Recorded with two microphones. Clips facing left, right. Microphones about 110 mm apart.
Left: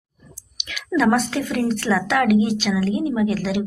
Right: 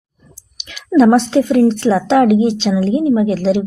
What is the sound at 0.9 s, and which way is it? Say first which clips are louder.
A woman's voice: right 9 dB; 25° right (ahead or behind).